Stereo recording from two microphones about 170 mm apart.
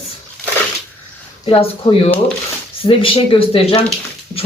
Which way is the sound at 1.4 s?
35° left (ahead or behind).